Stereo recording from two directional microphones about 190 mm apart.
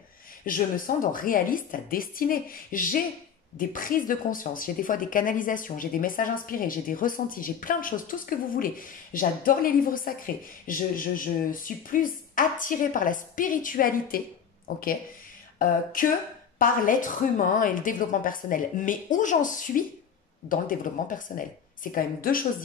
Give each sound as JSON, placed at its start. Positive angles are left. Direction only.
{"t": 0.5, "sound": "a woman's voice", "side_deg": 45}
{"t": 15.6, "sound": "a woman's voice", "side_deg": 45}